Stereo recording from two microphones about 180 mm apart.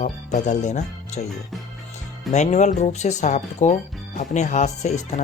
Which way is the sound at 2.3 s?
40° left (ahead or behind).